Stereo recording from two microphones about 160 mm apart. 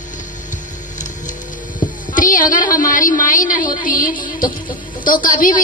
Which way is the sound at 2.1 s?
55° left (ahead or behind).